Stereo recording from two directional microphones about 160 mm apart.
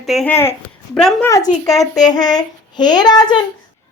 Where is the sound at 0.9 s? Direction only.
5° left (ahead or behind).